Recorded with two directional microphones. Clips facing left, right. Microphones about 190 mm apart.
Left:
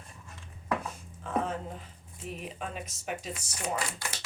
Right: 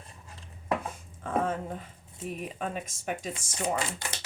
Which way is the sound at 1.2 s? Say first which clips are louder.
Right 3 dB; 50° right (ahead or behind).